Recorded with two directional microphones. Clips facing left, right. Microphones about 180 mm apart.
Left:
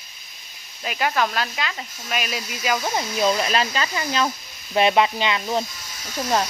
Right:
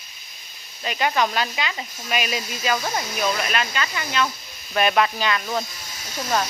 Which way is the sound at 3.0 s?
30° left (ahead or behind).